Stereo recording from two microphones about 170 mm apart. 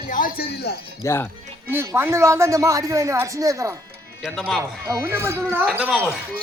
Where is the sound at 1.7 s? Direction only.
15° right (ahead or behind).